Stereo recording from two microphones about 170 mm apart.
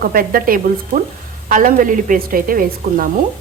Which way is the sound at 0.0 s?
60° right (ahead or behind).